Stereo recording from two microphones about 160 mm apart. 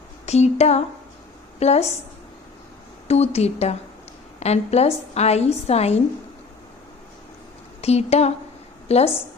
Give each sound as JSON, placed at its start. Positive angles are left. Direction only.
{"t": 0.3, "sound": "a sound", "side_deg": 45}
{"t": 1.5, "sound": "a woman's voice", "side_deg": 40}
{"t": 3.1, "sound": "a woman's voice", "side_deg": 40}
{"t": 7.8, "sound": "a woman's voice", "side_deg": 40}